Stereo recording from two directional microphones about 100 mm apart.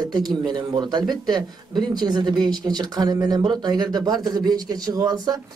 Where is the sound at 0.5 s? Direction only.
45° right (ahead or behind).